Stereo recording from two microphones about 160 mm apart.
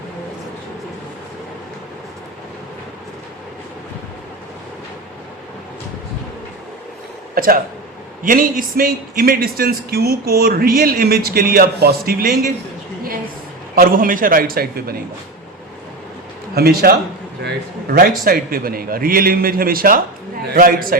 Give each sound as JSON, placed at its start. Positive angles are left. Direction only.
{"t": 7.3, "sound": "a man's voice", "side_deg": -65}
{"t": 13.7, "sound": "a man's voice", "side_deg": -60}
{"t": 16.6, "sound": "a man's voice", "side_deg": -80}
{"t": 17.9, "sound": "a man's voice", "side_deg": -65}